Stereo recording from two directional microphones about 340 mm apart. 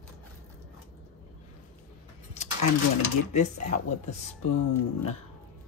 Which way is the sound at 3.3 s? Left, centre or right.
Left.